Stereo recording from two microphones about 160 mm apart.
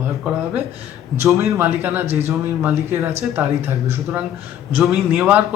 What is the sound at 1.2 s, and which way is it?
A man's voice, 20° right (ahead or behind).